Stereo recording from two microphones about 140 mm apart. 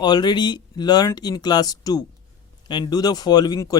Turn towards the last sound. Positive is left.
turn(degrees=25)  # may be behind; listen again after turning